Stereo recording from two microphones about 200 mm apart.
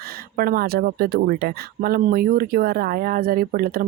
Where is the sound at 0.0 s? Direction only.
50° right (ahead or behind).